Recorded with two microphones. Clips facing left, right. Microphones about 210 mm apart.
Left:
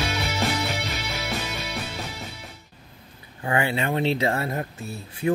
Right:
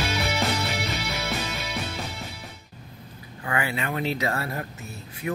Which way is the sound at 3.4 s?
30° left (ahead or behind).